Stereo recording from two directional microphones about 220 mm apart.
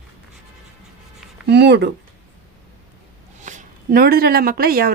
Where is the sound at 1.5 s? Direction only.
50° right (ahead or behind).